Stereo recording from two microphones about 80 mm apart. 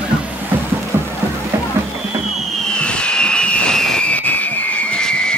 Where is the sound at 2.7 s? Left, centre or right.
Centre.